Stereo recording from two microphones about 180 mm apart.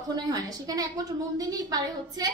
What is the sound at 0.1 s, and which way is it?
A woman's voice, 20° right (ahead or behind).